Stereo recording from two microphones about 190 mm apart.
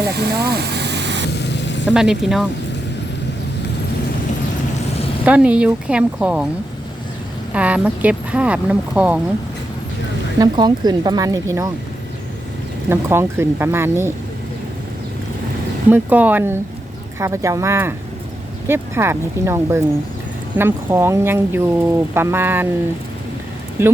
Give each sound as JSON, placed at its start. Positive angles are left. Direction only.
{"t": 0.1, "sound": "vehicle", "side_deg": -55}
{"t": 1.3, "sound": "a sound", "side_deg": 65}
{"t": 1.9, "sound": "a woman's voice", "side_deg": 0}
{"t": 5.2, "sound": "a woman's voice", "side_deg": -5}
{"t": 7.5, "sound": "speech", "side_deg": -5}
{"t": 10.4, "sound": "speech", "side_deg": -20}
{"t": 12.9, "sound": "speech", "side_deg": -10}
{"t": 15.9, "sound": "speech", "side_deg": -10}
{"t": 23.8, "sound": "speech", "side_deg": -15}